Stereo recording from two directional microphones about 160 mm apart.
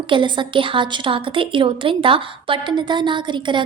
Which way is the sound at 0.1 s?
30° right (ahead or behind).